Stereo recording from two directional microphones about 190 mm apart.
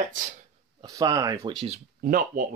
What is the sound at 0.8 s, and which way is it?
Speech, 20° right (ahead or behind).